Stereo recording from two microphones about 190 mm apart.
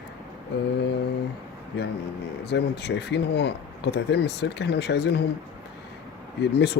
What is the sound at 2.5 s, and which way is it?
Speech, 65° left (ahead or behind).